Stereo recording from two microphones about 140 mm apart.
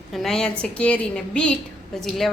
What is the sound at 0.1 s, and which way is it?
A woman's voice, centre (ahead or behind).